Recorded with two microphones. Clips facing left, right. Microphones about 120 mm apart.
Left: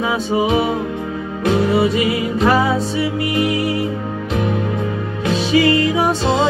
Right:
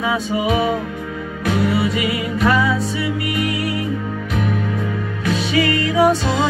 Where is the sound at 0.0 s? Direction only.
30° left (ahead or behind).